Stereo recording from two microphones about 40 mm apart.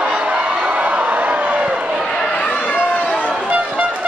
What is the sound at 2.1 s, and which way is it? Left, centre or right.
Chatter, left.